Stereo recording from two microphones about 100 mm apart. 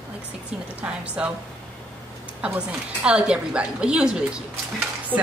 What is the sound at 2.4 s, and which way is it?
A woman's voice, 15° right (ahead or behind).